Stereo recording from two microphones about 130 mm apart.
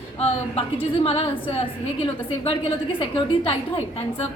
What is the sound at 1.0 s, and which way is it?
Speech, 45° left (ahead or behind).